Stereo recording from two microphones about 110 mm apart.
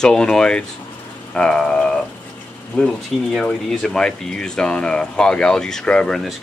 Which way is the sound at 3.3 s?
5° left (ahead or behind).